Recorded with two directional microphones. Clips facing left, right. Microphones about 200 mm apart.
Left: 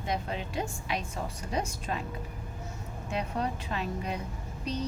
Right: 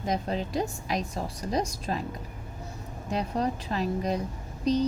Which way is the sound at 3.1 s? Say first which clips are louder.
Right 4 dB; 40° right (ahead or behind).